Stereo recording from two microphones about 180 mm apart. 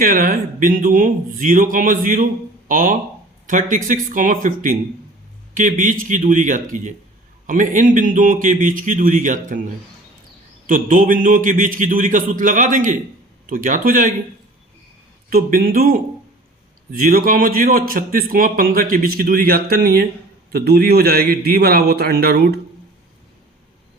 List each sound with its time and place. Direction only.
0.0 s a man's voice: 50° right (ahead or behind)
10.7 s a man's voice: 50° right (ahead or behind)
15.3 s a man's voice: 50° right (ahead or behind)